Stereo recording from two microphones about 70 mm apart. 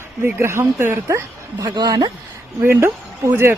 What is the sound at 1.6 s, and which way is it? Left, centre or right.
Speech, right.